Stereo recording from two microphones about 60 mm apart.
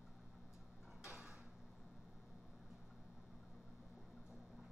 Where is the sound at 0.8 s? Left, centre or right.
Centre.